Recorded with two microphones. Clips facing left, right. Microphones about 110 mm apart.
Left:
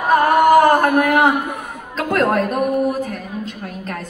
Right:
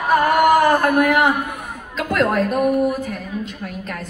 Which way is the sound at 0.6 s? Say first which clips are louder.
Left 2 dB; 35° left (ahead or behind).